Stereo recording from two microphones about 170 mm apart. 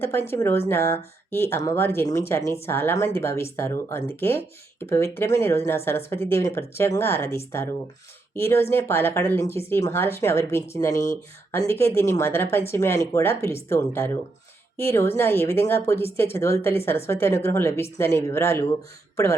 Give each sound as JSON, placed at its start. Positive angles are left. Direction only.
{"t": 0.0, "sound": "speech", "side_deg": 15}